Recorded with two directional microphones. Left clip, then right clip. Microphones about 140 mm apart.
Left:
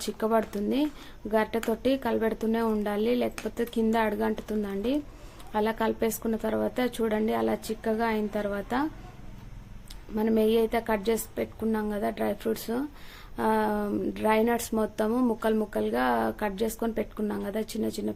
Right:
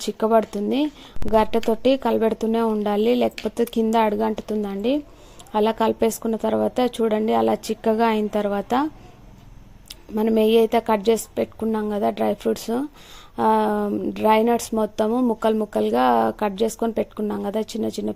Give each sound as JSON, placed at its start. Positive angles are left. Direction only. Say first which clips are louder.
{"t": 0.0, "sound": "speech", "louder": "right 8 dB", "side_deg": -30}
{"t": 9.9, "sound": "speech", "louder": "right 6 dB", "side_deg": -45}